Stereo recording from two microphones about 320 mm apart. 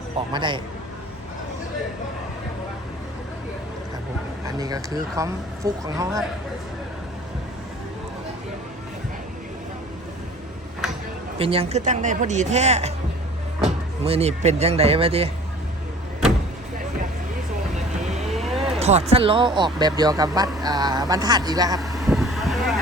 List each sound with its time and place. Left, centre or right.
0.3 s speech: centre
4.5 s speech: centre
11.3 s speech: centre
18.3 s vehicle: centre
18.7 s speech: centre
21.8 s vehicle: centre